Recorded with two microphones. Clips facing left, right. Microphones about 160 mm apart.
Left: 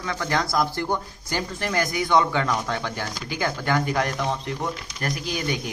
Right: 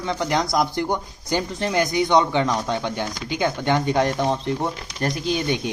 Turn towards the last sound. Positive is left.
turn(degrees=-25)  # may be behind; listen again after turning